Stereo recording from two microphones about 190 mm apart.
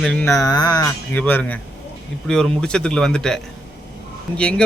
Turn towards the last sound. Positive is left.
turn(degrees=5)  # may be behind; listen again after turning